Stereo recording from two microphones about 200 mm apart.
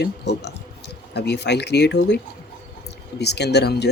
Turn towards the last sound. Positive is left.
turn(degrees=55)  # may be behind; listen again after turning